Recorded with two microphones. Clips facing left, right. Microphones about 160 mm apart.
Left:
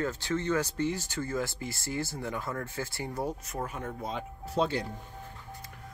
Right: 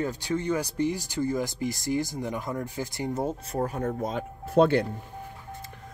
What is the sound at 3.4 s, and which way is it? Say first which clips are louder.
Speech: right 8 dB; 35° right (ahead or behind).